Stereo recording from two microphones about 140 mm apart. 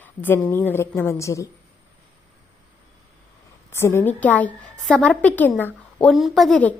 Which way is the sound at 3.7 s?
15° left (ahead or behind).